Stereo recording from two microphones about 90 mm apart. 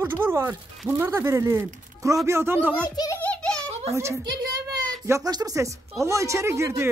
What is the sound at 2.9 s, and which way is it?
Speech, 45° left (ahead or behind).